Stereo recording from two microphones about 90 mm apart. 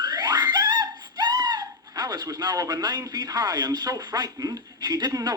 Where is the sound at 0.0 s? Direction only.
50° right (ahead or behind).